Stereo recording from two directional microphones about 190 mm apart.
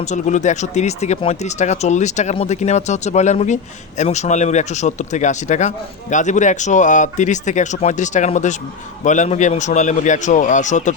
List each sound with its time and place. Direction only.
0.1 s speech: 40° left (ahead or behind)